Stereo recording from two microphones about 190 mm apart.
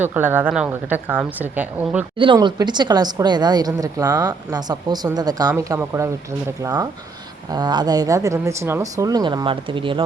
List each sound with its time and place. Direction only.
0.0 s speech: 10° right (ahead or behind)
2.1 s a woman's voice: 25° right (ahead or behind)